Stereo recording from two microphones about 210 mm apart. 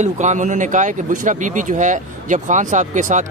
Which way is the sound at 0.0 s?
35° right (ahead or behind).